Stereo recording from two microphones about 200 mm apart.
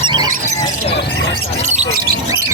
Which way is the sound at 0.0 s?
20° right (ahead or behind).